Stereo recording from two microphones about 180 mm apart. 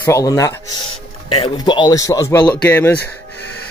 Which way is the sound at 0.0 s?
20° left (ahead or behind).